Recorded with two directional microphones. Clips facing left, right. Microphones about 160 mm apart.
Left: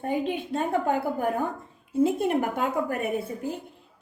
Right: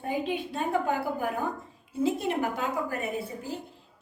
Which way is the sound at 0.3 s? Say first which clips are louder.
Left 2 dB; 50° left (ahead or behind).